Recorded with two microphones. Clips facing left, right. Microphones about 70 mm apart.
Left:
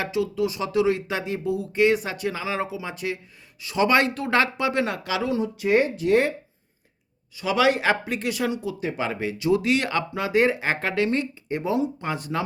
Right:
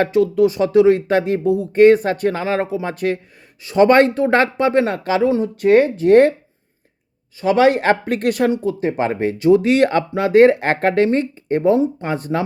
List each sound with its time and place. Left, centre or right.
0.0 s speech: right
5.5 s speech: right
7.4 s speech: right
8.5 s speech: right